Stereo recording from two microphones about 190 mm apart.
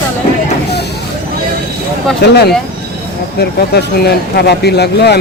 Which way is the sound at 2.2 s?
60° left (ahead or behind).